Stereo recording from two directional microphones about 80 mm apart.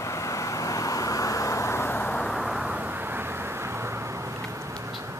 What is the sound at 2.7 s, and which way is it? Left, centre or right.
Vehicle, right.